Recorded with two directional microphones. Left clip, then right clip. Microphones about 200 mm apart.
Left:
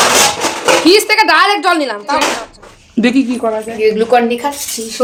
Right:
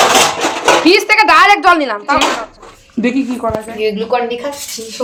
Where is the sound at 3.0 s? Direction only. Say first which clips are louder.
Left 3 dB; 40° left (ahead or behind).